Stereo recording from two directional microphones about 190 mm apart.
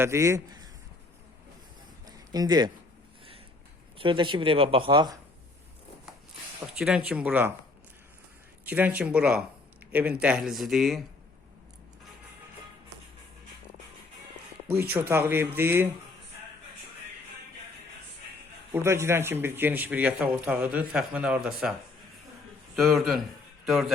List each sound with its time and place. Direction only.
0.0 s a man's voice: 15° right (ahead or behind)
2.0 s a sound: 20° right (ahead or behind)
3.9 s speech: 25° right (ahead or behind)
6.7 s speech: 5° right (ahead or behind)
8.6 s speech: 10° right (ahead or behind)
14.9 s speech: 10° right (ahead or behind)
18.7 s speech: 15° right (ahead or behind)